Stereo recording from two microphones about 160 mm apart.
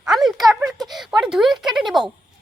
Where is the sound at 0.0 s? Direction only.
Centre (ahead or behind).